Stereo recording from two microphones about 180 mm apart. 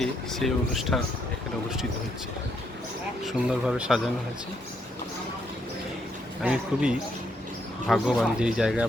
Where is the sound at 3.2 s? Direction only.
5° right (ahead or behind).